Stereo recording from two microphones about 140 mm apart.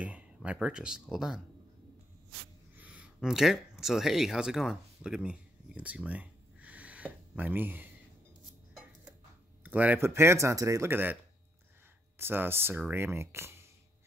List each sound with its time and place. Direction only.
0.0 s speech: 10° right (ahead or behind)
2.7 s a sound: 10° right (ahead or behind)
9.6 s speech: 10° right (ahead or behind)
12.2 s speech: 15° right (ahead or behind)